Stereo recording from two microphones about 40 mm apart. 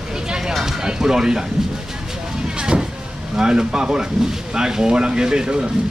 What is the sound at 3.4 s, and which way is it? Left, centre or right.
Speech, centre.